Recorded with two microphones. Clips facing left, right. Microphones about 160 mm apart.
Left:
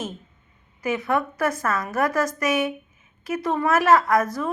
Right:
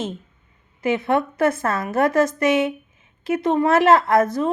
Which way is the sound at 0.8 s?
25° right (ahead or behind).